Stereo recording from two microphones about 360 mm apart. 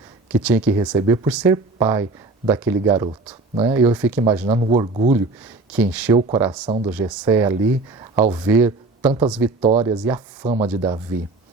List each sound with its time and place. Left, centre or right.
0.3 s speech: centre
5.7 s speech: centre